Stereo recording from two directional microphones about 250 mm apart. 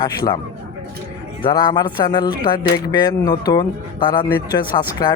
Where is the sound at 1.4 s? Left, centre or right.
Centre.